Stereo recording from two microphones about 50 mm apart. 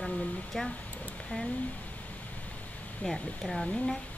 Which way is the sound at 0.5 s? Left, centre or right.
Centre.